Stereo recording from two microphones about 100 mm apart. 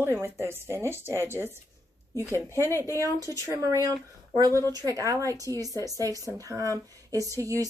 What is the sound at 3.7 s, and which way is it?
Speech, 35° right (ahead or behind).